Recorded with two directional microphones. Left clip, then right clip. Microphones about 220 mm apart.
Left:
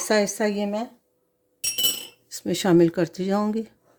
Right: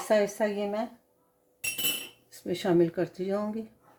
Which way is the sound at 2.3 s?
55° left (ahead or behind).